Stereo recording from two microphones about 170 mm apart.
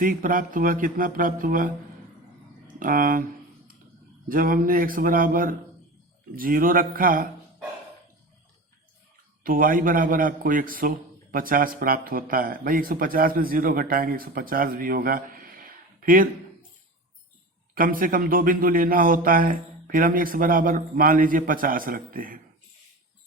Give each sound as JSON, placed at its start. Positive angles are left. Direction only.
{"t": 0.0, "sound": "a man's voice", "side_deg": -55}
{"t": 2.7, "sound": "speech", "side_deg": -55}
{"t": 4.3, "sound": "a man's voice", "side_deg": -55}
{"t": 9.4, "sound": "a man's voice", "side_deg": -55}
{"t": 17.7, "sound": "a man's voice", "side_deg": -55}